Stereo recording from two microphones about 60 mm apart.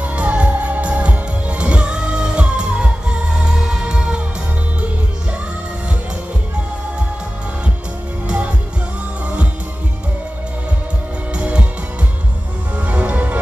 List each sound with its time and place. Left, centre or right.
0.0 s music: right
11.3 s music: centre
12.7 s music: right